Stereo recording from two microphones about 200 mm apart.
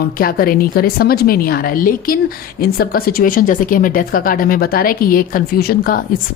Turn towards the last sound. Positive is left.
turn(degrees=50)  # may be behind; listen again after turning